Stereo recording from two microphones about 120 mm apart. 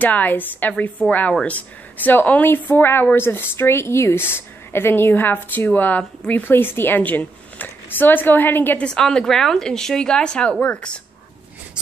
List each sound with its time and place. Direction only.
0.0 s speech: 15° left (ahead or behind)